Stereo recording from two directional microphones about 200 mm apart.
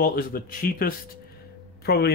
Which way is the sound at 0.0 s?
45° left (ahead or behind).